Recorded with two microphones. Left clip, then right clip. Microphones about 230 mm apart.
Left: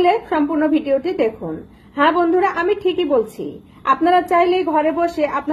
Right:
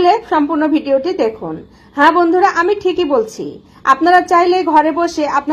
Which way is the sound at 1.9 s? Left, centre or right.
Right.